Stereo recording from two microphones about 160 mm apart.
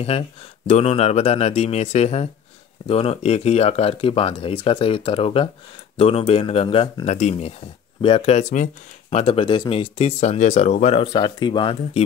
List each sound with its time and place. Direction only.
0.0 s speech: 40° left (ahead or behind)
11.1 s speech: 30° left (ahead or behind)